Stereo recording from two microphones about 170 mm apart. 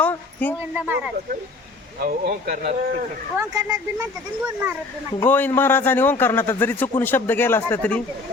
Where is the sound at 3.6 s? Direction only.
20° right (ahead or behind).